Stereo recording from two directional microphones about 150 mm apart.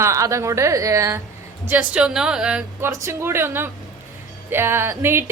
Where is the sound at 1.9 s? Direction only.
5° right (ahead or behind).